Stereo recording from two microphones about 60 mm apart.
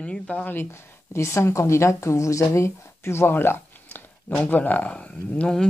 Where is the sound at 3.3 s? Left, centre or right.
Left.